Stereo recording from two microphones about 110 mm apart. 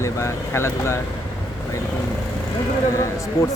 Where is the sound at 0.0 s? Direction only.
25° left (ahead or behind).